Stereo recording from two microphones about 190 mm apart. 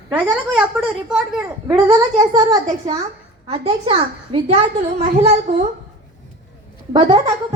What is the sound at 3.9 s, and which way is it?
Speech, 30° right (ahead or behind).